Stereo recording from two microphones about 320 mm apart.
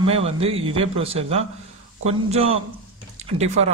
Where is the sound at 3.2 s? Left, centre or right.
Centre.